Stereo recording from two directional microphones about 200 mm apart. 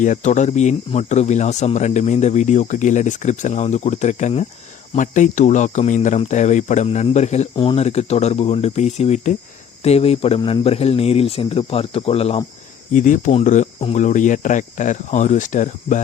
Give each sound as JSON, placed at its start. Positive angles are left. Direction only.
{"t": 0.0, "sound": "speech", "side_deg": 40}